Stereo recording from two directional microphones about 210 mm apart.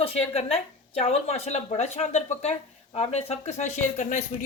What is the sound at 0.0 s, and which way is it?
A man's voice, 30° left (ahead or behind).